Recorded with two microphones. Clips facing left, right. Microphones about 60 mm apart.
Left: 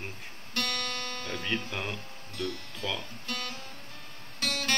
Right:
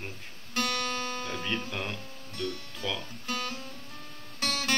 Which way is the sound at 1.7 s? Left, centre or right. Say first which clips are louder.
Even; centre.